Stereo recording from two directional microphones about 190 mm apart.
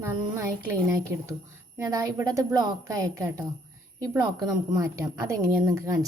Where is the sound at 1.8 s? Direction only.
15° right (ahead or behind).